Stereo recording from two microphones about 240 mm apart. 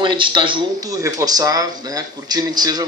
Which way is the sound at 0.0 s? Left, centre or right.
Centre.